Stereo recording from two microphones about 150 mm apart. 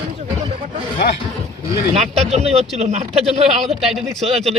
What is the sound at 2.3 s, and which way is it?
Speech, 45° right (ahead or behind).